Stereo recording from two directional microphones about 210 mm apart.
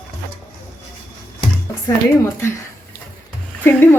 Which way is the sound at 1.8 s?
15° left (ahead or behind).